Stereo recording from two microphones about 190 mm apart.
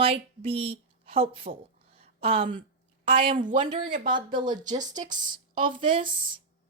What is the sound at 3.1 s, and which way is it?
Speech, 45° right (ahead or behind).